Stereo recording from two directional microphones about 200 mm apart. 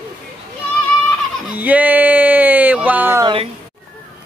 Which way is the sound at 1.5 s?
10° right (ahead or behind).